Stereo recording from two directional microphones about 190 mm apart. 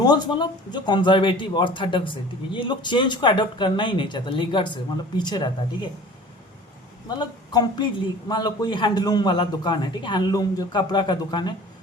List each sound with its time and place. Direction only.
0.0 s a man's voice: 20° left (ahead or behind)
7.1 s a man's voice: 20° left (ahead or behind)